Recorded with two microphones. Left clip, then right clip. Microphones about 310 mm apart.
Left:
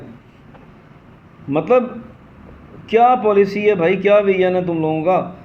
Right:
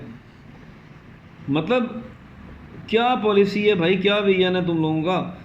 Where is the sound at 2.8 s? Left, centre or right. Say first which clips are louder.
Left 7 dB; centre.